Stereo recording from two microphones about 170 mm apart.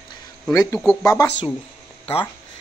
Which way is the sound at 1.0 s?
20° left (ahead or behind).